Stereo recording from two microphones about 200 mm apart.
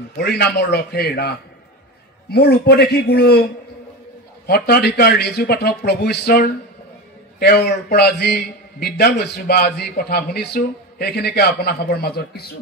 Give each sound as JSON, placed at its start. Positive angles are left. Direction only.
{"t": 0.2, "sound": "a man's voice", "side_deg": 55}
{"t": 4.5, "sound": "a man's voice", "side_deg": 50}